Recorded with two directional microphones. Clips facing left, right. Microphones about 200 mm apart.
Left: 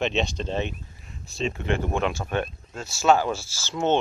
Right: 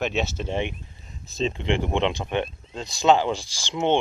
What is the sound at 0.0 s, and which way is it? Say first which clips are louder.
Speech: left 1 dB; 5° right (ahead or behind).